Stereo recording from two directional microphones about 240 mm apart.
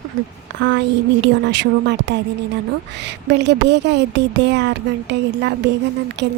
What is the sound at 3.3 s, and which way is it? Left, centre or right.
A woman's voice, right.